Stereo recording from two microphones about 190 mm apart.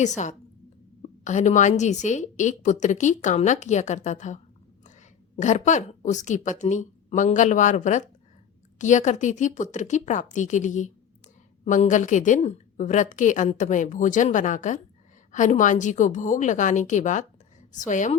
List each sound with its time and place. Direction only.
1.2 s a woman's voice: 40° left (ahead or behind)
5.4 s a woman's voice: 40° left (ahead or behind)